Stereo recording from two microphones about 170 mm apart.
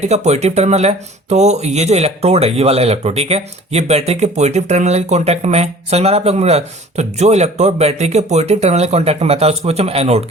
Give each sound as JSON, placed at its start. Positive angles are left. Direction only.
{"t": 0.0, "sound": "speech", "side_deg": -40}